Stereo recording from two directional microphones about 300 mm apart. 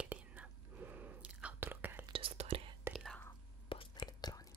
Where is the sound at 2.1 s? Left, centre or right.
Centre.